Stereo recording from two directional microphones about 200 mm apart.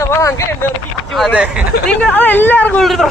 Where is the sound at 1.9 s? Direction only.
5° left (ahead or behind).